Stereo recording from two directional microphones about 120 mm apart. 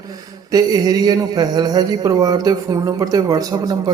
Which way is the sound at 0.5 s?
30° right (ahead or behind).